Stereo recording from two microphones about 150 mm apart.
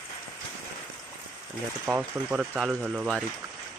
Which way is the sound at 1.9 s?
10° right (ahead or behind).